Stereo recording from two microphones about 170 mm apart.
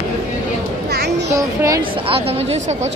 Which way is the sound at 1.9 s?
35° right (ahead or behind).